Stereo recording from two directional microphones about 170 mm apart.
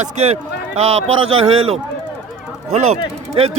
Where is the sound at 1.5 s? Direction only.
35° right (ahead or behind).